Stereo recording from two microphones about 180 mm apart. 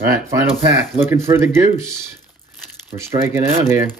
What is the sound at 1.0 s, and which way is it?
Speech, 15° right (ahead or behind).